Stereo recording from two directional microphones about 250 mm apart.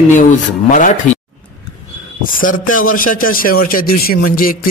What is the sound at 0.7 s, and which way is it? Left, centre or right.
Speech, left.